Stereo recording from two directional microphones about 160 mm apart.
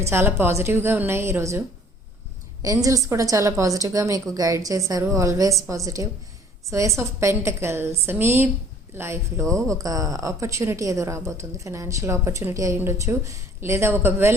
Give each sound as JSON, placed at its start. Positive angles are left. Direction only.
{"t": 0.1, "sound": "a woman's voice", "side_deg": -15}